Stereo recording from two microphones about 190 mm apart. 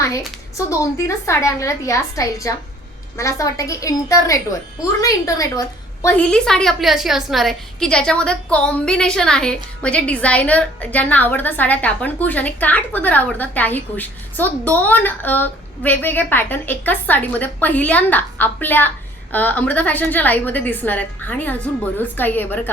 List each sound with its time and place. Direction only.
0.5 s a woman's voice: 15° left (ahead or behind)